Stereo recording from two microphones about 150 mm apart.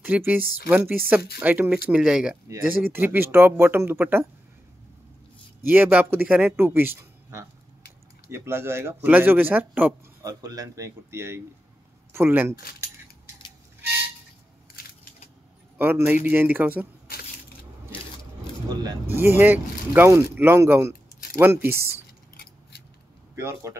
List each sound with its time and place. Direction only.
0.0 s speech: 10° right (ahead or behind)
2.4 s speech: 15° right (ahead or behind)
5.6 s speech: 15° right (ahead or behind)
10.2 s speech: 25° right (ahead or behind)
15.8 s speech: 15° right (ahead or behind)
18.7 s speech: 25° right (ahead or behind)
19.1 s speech: 15° right (ahead or behind)
23.3 s speech: 20° right (ahead or behind)